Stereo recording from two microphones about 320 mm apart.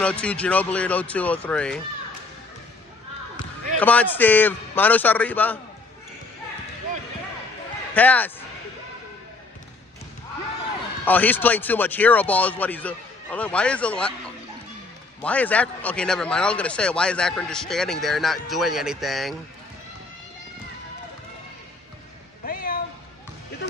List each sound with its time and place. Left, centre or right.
0.0 s speech: centre
3.8 s speech: centre
7.9 s speech: centre
11.1 s speech: centre
15.2 s speech: centre
22.4 s cat: left